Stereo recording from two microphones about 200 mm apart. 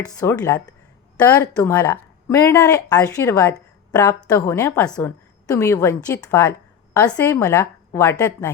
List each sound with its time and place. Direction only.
0.2 s speech: 15° left (ahead or behind)